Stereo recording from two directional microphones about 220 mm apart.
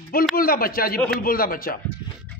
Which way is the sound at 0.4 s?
40° left (ahead or behind).